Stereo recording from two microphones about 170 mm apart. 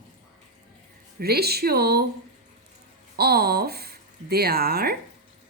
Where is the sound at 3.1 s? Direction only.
65° right (ahead or behind).